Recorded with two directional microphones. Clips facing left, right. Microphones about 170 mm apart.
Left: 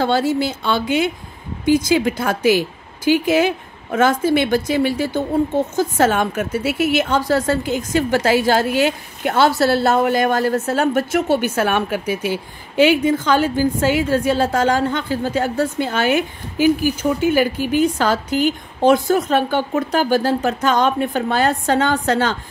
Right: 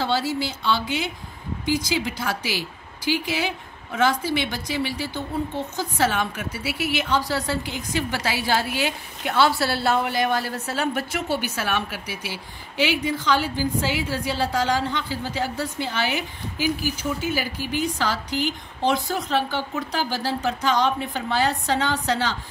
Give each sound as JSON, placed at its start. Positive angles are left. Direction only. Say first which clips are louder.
{"t": 0.0, "sound": "a woman's voice", "louder": "left 7 dB", "side_deg": 50}